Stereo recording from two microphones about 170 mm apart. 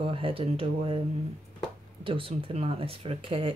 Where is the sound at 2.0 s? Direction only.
30° right (ahead or behind).